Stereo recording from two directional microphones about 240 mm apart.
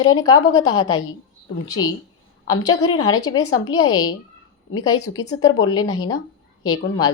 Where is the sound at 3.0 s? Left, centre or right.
Left.